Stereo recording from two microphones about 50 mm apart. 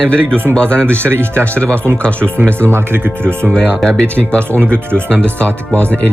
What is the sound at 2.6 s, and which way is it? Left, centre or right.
Speech, right.